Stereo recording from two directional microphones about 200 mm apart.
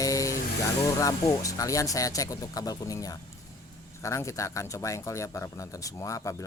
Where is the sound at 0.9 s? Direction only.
15° left (ahead or behind).